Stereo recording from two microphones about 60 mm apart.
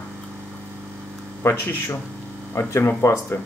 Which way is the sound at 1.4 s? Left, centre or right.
Left.